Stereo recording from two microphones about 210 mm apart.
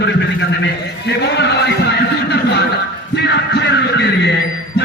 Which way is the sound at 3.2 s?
55° left (ahead or behind).